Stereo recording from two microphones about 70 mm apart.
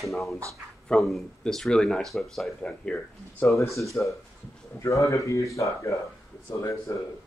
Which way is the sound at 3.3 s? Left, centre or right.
Left.